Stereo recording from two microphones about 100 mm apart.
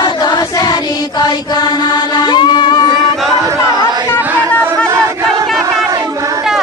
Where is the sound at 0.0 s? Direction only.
45° left (ahead or behind).